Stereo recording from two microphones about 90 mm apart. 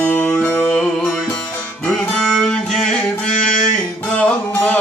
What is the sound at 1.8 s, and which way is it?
Music, 5° left (ahead or behind).